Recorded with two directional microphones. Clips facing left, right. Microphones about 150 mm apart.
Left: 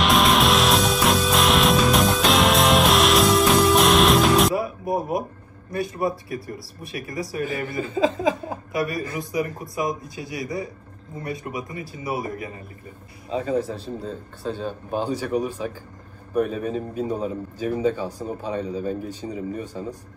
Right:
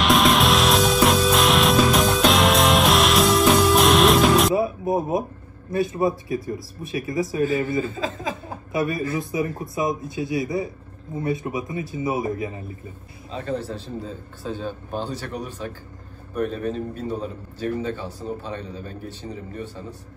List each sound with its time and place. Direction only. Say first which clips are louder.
0.0 s music: right 1 dB; centre (ahead or behind)
4.6 s music: right 3 dB; 25° right (ahead or behind)
5.7 s speech: right 3 dB; 25° right (ahead or behind)
7.9 s speech: left 7 dB; 20° left (ahead or behind)
8.7 s speech: right 3 dB; 25° right (ahead or behind)
13.3 s a man's voice: left 4 dB; 10° left (ahead or behind)
13.7 s a man's voice: left 1 dB; centre (ahead or behind)